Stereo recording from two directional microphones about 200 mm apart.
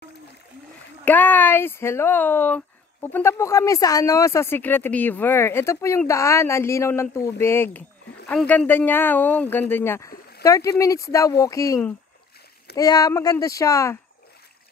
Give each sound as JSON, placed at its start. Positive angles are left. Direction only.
{"t": 1.0, "sound": "speech", "side_deg": 10}